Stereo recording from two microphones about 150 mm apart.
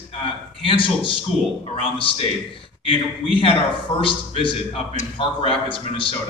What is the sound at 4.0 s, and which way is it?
A man's voice, 35° left (ahead or behind).